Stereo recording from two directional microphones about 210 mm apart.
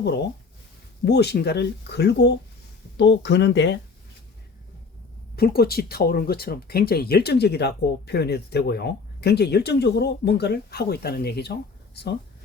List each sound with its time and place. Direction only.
1.0 s speech: 50° left (ahead or behind)
5.4 s speech: 45° left (ahead or behind)